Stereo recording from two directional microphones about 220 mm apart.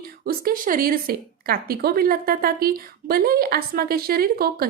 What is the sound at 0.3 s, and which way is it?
Speech, 40° right (ahead or behind).